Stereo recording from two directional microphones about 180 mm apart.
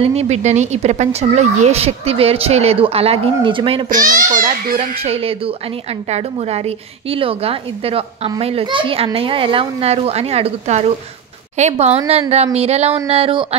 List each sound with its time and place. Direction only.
0.0 s a woman's voice: 35° right (ahead or behind)
3.9 s a child's voice: 50° right (ahead or behind)
4.7 s a woman's voice: 35° right (ahead or behind)